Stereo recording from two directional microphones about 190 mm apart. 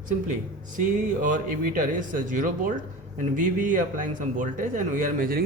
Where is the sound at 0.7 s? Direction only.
45° right (ahead or behind).